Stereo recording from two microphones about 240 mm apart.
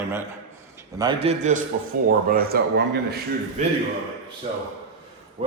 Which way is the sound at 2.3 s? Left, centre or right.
Right.